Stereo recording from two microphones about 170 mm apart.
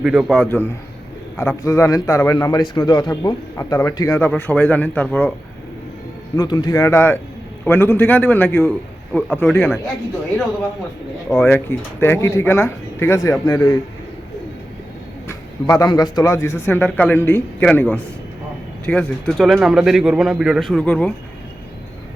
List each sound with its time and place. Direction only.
0.0 s speech: 5° right (ahead or behind)
0.4 s a man's voice: 10° left (ahead or behind)
4.3 s a man's voice: 10° left (ahead or behind)
6.3 s a man's voice: 25° left (ahead or behind)
11.3 s a man's voice: 10° left (ahead or behind)
15.3 s a man's voice: 20° left (ahead or behind)